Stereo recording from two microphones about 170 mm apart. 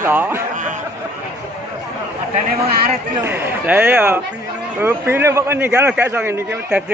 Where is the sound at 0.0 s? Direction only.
10° right (ahead or behind).